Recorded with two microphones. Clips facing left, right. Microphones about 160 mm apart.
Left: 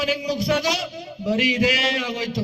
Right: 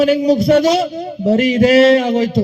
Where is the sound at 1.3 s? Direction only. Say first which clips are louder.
Right 9 dB; 50° right (ahead or behind).